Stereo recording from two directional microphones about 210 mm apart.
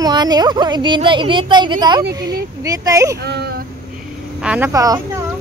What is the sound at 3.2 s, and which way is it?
Speech, 50° right (ahead or behind).